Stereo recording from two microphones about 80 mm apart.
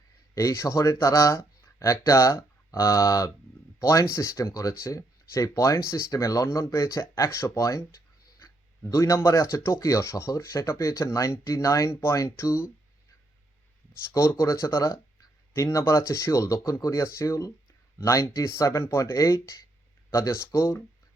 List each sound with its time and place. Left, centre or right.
0.3 s speech: left
14.1 s speech: left